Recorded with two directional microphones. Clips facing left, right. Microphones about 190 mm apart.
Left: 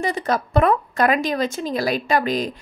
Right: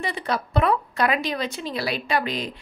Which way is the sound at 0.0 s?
45° left (ahead or behind).